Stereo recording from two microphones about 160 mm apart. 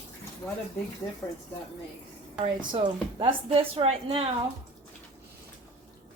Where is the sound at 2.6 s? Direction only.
30° right (ahead or behind).